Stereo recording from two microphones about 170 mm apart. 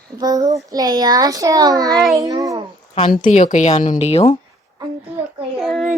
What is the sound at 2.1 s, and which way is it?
Speech, 20° right (ahead or behind).